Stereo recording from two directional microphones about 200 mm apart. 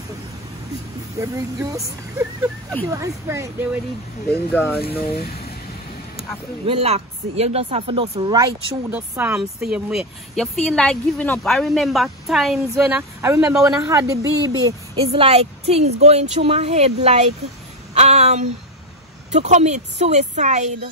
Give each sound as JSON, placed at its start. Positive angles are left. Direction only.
{"t": 1.2, "sound": "speech", "side_deg": -15}
{"t": 4.3, "sound": "speech", "side_deg": 10}
{"t": 4.7, "sound": "speech", "side_deg": 50}
{"t": 6.6, "sound": "speech", "side_deg": -30}
{"t": 8.9, "sound": "speech", "side_deg": -10}
{"t": 15.2, "sound": "speech", "side_deg": -30}
{"t": 17.9, "sound": "a sound", "side_deg": -35}
{"t": 19.3, "sound": "speech", "side_deg": -35}